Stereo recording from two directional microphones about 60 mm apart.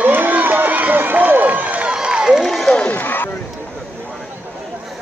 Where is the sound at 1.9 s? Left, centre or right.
Centre.